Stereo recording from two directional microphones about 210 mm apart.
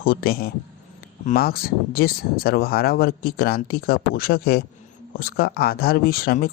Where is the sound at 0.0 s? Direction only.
45° left (ahead or behind).